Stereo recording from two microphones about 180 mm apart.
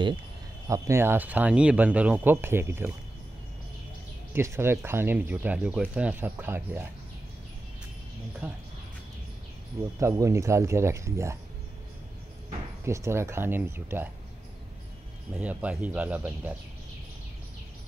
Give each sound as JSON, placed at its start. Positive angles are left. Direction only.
{"t": 0.7, "sound": "speech", "side_deg": -15}
{"t": 4.3, "sound": "speech", "side_deg": -15}
{"t": 8.4, "sound": "speech", "side_deg": -10}
{"t": 9.9, "sound": "speech", "side_deg": -15}
{"t": 12.8, "sound": "speech", "side_deg": -15}
{"t": 15.3, "sound": "speech", "side_deg": -5}